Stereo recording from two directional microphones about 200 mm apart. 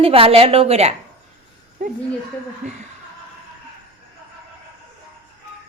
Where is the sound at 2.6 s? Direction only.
35° right (ahead or behind).